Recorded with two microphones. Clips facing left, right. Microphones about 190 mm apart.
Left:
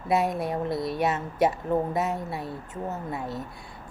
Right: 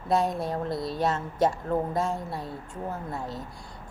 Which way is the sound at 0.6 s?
25° left (ahead or behind).